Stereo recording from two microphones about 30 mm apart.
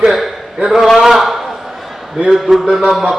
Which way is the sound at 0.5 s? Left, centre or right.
Centre.